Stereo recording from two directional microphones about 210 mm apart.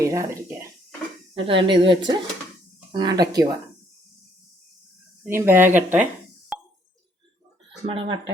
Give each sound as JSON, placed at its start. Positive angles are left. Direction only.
{"t": 0.0, "sound": "speech", "side_deg": -15}
{"t": 1.3, "sound": "speech", "side_deg": -25}
{"t": 5.2, "sound": "speech", "side_deg": -10}
{"t": 6.5, "sound": "a sound", "side_deg": -5}
{"t": 7.9, "sound": "speech", "side_deg": -25}